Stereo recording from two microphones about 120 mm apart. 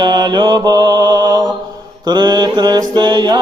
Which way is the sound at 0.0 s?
35° right (ahead or behind).